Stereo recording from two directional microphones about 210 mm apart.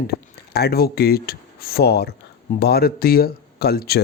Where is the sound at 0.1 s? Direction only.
50° left (ahead or behind).